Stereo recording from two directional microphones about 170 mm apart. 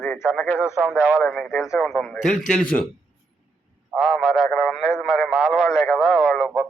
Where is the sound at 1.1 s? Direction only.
5° left (ahead or behind).